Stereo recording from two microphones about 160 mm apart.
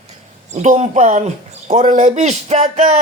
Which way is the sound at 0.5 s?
45° right (ahead or behind).